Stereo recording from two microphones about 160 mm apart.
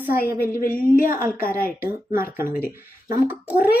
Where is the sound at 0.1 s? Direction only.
70° left (ahead or behind).